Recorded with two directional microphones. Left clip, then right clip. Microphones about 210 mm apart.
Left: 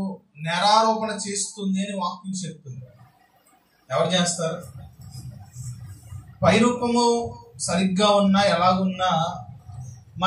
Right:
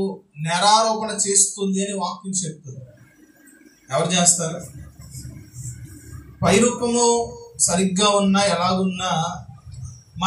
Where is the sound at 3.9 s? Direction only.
25° right (ahead or behind).